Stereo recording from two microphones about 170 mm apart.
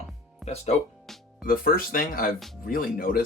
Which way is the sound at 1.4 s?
60° left (ahead or behind).